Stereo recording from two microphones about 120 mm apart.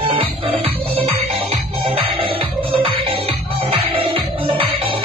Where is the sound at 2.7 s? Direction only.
45° right (ahead or behind).